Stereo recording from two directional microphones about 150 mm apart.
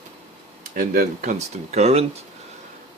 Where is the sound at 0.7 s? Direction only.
70° right (ahead or behind).